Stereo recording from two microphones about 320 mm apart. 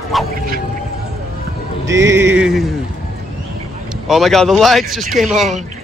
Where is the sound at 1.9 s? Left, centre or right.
Centre.